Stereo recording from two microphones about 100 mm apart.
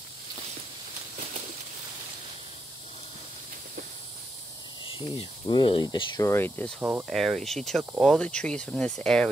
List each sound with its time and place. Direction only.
4.8 s speech: 60° left (ahead or behind)
6.2 s speech: 20° left (ahead or behind)
6.8 s speech: 20° right (ahead or behind)
7.1 s speech: centre (ahead or behind)